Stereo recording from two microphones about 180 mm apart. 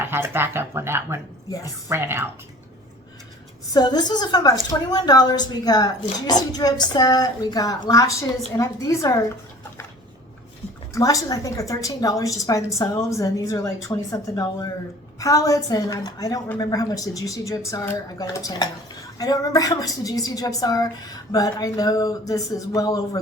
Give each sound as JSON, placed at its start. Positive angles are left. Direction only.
{"t": 0.0, "sound": "speech", "side_deg": -10}
{"t": 1.5, "sound": "a woman's voice", "side_deg": 20}
{"t": 1.9, "sound": "a woman's voice", "side_deg": -10}
{"t": 3.7, "sound": "a woman's voice", "side_deg": 20}
{"t": 10.9, "sound": "a woman's voice", "side_deg": 20}